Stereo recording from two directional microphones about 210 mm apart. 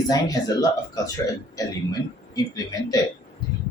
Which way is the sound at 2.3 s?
15° left (ahead or behind).